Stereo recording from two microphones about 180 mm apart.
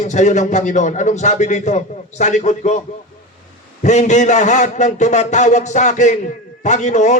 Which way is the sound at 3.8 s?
40° left (ahead or behind).